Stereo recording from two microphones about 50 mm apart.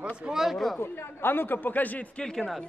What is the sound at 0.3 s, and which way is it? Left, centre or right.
Speech, centre.